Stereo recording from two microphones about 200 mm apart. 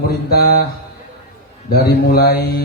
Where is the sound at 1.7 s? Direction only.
50° left (ahead or behind).